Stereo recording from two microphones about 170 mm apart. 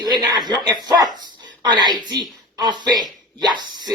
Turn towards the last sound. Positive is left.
turn(degrees=-25)  # may be behind; listen again after turning